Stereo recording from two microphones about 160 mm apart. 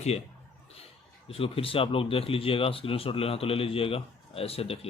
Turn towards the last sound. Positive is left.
turn(degrees=40)  # may be behind; listen again after turning